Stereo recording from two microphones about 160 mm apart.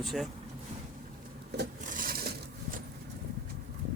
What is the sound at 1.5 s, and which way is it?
Rub, 90° right.